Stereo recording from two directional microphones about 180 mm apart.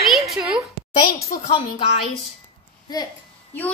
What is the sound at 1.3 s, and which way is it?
Speech, 30° left (ahead or behind).